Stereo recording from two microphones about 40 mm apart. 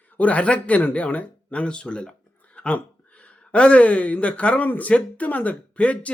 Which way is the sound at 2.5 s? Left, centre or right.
Left.